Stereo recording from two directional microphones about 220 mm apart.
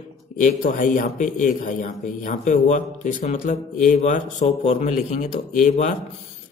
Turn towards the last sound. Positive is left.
turn(degrees=35)  # may be behind; listen again after turning